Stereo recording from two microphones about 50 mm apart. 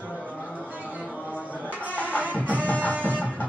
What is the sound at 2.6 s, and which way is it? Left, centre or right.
Music, left.